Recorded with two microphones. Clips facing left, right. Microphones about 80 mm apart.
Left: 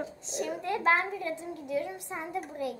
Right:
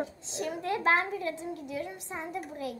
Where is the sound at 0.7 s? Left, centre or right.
Centre.